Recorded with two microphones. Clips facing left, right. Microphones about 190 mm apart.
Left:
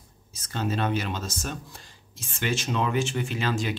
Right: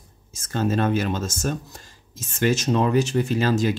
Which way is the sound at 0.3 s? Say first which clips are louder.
Right 6 dB; 45° right (ahead or behind).